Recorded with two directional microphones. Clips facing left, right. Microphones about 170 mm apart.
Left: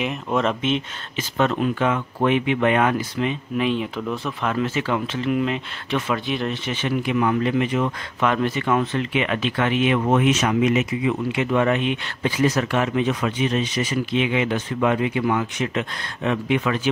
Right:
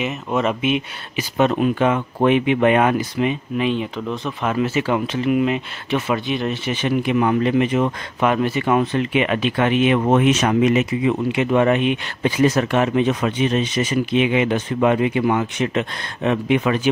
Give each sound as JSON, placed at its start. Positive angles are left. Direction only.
{"t": 0.0, "sound": "speech", "side_deg": -5}
{"t": 3.5, "sound": "speech", "side_deg": 0}
{"t": 4.5, "sound": "speech", "side_deg": -10}
{"t": 9.9, "sound": "speech", "side_deg": -30}
{"t": 10.4, "sound": "speech", "side_deg": -45}
{"t": 11.3, "sound": "speech", "side_deg": -20}